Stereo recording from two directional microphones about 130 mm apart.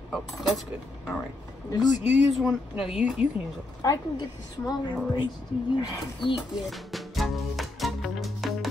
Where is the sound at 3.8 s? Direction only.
30° left (ahead or behind).